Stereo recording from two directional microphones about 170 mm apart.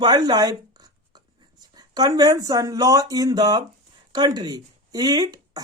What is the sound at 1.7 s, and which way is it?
Speech, 25° right (ahead or behind).